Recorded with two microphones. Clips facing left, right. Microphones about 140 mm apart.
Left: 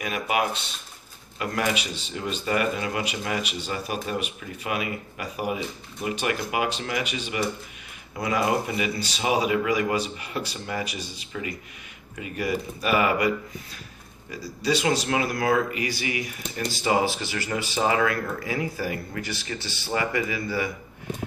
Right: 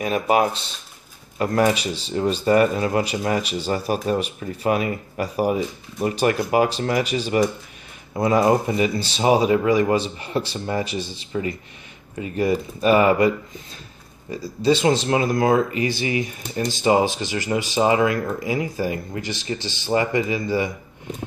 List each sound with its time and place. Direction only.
0.0 s speech: 35° right (ahead or behind)
14.6 s speech: 25° right (ahead or behind)